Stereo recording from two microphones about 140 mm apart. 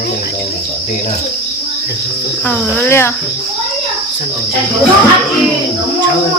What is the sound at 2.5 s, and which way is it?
Speech, 15° left (ahead or behind).